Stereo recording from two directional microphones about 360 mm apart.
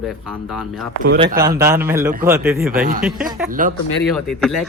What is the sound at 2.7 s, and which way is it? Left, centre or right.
Speech, right.